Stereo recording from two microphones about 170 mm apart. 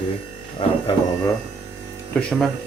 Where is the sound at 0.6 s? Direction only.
40° left (ahead or behind).